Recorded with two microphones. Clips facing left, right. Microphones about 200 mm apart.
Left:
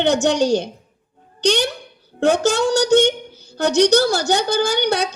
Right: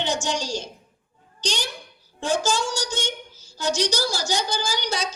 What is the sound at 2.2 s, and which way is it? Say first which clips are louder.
A woman's voice: left 8 dB; 65° left (ahead or behind).